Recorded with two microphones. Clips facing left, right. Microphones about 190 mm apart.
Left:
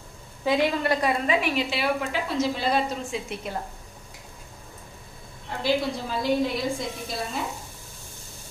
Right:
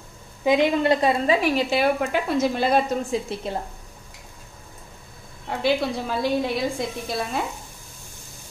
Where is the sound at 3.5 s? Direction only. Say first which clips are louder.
Right 3 dB; 30° right (ahead or behind).